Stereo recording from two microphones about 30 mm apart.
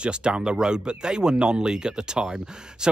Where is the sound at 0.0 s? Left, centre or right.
Right.